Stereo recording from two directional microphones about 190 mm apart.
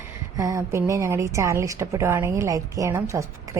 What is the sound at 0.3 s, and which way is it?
A woman's voice, 15° right (ahead or behind).